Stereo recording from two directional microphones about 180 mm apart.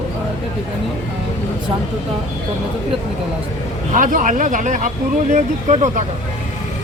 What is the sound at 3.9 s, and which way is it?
Speech, 45° right (ahead or behind).